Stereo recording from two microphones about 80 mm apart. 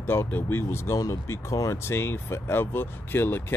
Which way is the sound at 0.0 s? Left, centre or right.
Left.